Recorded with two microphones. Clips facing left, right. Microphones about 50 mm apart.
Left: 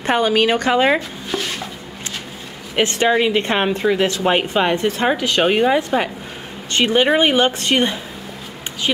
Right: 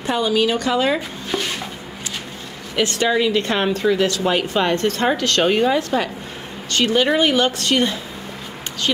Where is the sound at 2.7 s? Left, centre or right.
Left.